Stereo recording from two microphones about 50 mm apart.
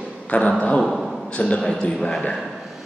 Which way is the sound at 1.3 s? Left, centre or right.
Left.